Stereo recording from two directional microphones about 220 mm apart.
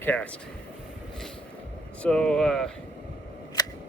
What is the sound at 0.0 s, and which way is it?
Speech, 5° left (ahead or behind).